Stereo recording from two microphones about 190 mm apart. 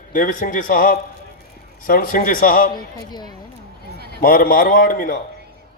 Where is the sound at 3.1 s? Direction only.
20° left (ahead or behind).